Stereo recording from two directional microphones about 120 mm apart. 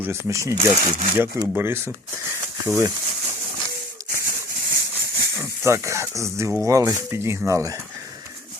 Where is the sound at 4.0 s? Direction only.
30° right (ahead or behind).